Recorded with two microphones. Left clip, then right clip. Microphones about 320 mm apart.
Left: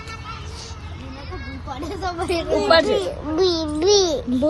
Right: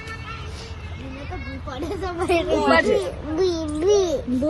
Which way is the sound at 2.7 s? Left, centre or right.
Left.